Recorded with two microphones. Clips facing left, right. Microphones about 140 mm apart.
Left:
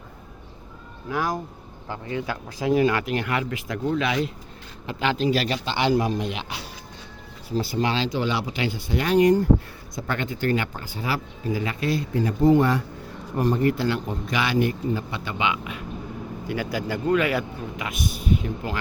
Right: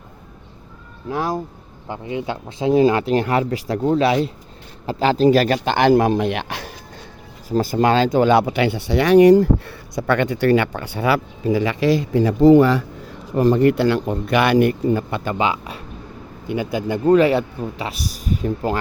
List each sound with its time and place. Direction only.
1.1 s a man's voice: 30° right (ahead or behind); by 9.5 s 85° right
9.9 s a man's voice: 70° right (ahead or behind); by 15.8 s 35° right (ahead or behind)
16.5 s speech: 20° right (ahead or behind); by 18.8 s 40° right (ahead or behind)